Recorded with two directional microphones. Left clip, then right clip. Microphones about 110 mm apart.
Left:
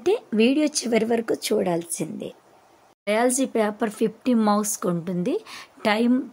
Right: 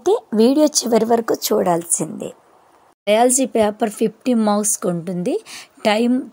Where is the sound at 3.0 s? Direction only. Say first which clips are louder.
Right 7 dB; 35° right (ahead or behind).